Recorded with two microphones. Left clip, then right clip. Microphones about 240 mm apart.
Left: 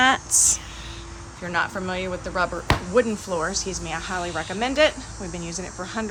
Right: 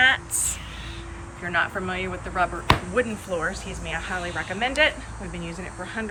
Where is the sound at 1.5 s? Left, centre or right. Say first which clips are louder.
Even; centre.